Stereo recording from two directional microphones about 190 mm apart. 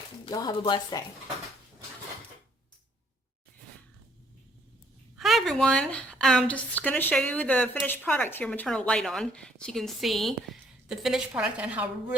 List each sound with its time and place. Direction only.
0.3 s a woman's voice: 20° left (ahead or behind)
5.1 s a woman's voice: centre (ahead or behind)